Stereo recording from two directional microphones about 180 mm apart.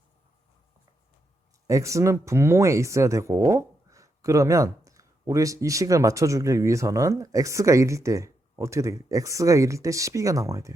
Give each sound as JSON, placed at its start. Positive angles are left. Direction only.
{"t": 1.6, "sound": "speech", "side_deg": -15}